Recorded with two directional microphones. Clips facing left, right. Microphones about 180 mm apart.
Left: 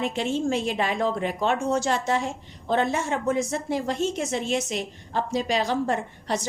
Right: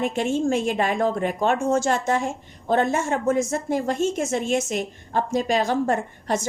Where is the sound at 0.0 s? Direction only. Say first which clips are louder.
Right 3 dB; 50° right (ahead or behind).